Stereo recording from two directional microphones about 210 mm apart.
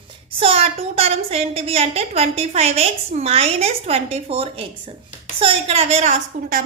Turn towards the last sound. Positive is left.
turn(degrees=-35)  # may be behind; listen again after turning